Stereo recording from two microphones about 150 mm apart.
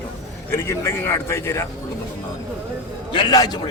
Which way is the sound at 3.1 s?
30° left (ahead or behind).